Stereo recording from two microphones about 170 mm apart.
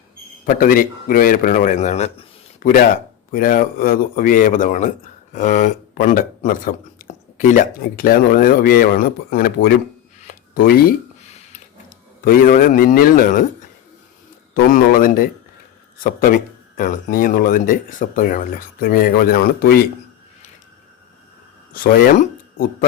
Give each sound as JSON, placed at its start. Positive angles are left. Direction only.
{"t": 0.4, "sound": "speech", "side_deg": 55}
{"t": 2.6, "sound": "speech", "side_deg": 50}
{"t": 12.2, "sound": "speech", "side_deg": 55}
{"t": 14.5, "sound": "speech", "side_deg": 60}
{"t": 21.7, "sound": "speech", "side_deg": 55}